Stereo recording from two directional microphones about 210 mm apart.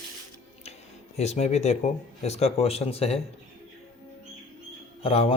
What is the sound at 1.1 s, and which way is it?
Speech, 30° left (ahead or behind).